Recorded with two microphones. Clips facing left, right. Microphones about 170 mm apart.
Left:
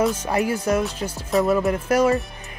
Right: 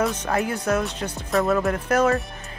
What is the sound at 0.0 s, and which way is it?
Speech, 10° left (ahead or behind).